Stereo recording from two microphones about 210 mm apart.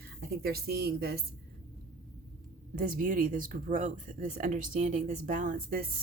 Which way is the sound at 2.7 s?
40° right (ahead or behind).